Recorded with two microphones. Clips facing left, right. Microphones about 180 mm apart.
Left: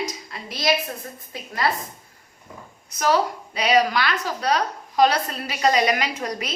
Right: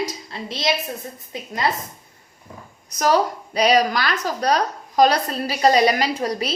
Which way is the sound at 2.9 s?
40° right (ahead or behind).